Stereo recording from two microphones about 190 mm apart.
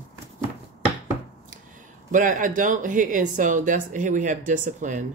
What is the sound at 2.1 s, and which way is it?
Speech, 45° right (ahead or behind).